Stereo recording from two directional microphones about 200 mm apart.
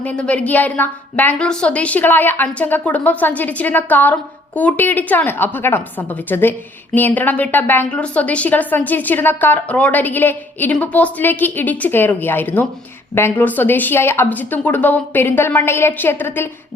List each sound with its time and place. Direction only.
0.0 s a woman's voice: 5° left (ahead or behind)